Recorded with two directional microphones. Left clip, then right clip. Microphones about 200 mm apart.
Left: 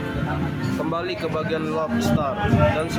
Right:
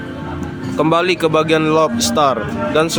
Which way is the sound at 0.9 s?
45° right (ahead or behind).